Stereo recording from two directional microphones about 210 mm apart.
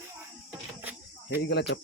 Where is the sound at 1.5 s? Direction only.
55° left (ahead or behind).